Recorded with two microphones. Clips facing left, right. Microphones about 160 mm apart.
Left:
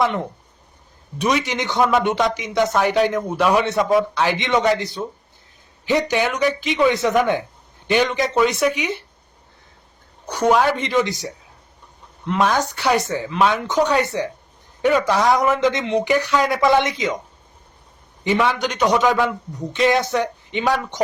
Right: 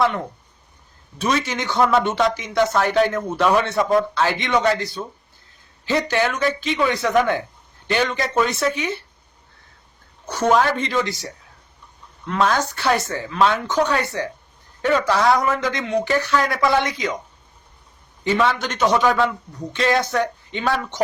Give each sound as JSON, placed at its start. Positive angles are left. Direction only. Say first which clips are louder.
{"t": 0.0, "sound": "a man's voice", "louder": "even", "side_deg": 20}
{"t": 10.2, "sound": "a man's voice", "louder": "left 1 dB", "side_deg": 15}
{"t": 12.3, "sound": "a man's voice", "louder": "left 1 dB", "side_deg": 15}
{"t": 18.3, "sound": "a man's voice", "louder": "left 1 dB", "side_deg": 15}